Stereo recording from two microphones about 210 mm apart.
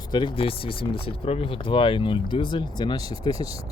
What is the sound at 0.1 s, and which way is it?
Speech, 20° left (ahead or behind).